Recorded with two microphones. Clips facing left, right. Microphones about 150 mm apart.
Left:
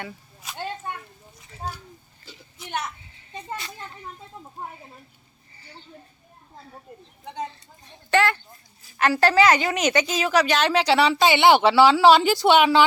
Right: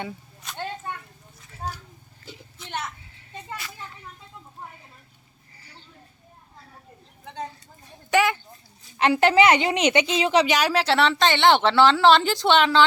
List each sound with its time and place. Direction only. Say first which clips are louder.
7.9 s a woman's voice: even; 15° right (ahead or behind)
10.7 s speech: left 2 dB; centre (ahead or behind)